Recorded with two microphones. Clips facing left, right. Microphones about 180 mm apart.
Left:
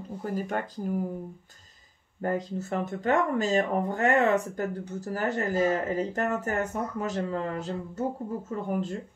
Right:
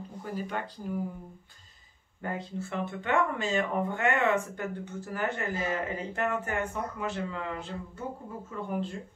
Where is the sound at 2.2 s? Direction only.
40° left (ahead or behind).